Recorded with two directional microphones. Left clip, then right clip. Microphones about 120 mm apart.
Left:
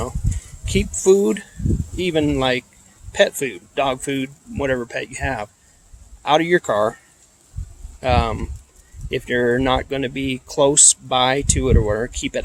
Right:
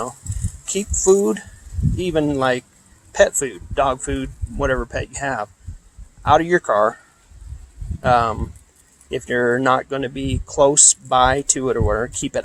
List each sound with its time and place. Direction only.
0.6 s speech: 10° left (ahead or behind)
8.0 s speech: 10° left (ahead or behind)